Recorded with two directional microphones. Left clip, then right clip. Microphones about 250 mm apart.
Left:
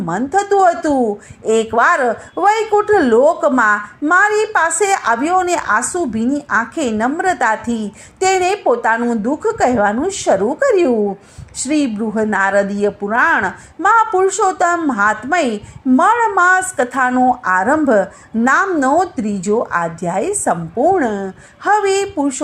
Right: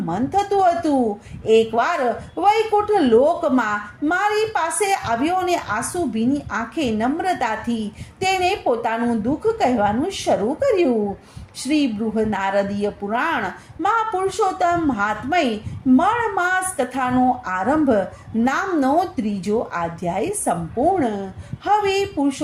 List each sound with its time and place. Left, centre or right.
0.0 s a woman's voice: left